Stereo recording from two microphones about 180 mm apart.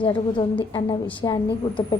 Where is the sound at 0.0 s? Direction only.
30° left (ahead or behind).